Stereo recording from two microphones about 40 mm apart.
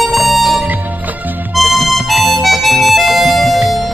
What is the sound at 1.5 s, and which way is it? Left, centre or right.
Harmonica, centre.